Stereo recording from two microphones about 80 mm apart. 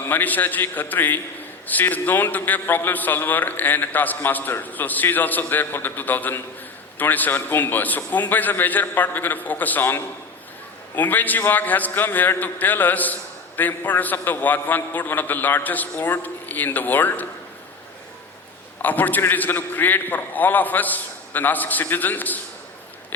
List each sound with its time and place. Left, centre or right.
0.1 s a man's voice: left
18.8 s a man's voice: left